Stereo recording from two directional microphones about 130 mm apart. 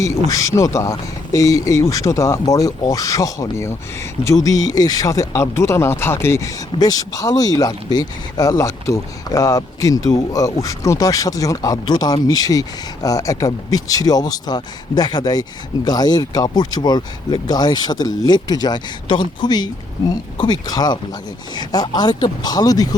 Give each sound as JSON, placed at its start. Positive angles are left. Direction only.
{"t": 0.3, "sound": "speech", "side_deg": 25}